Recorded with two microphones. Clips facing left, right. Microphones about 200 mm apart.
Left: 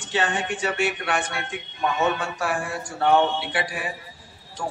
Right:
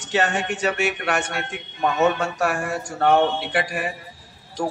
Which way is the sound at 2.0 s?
45° right (ahead or behind).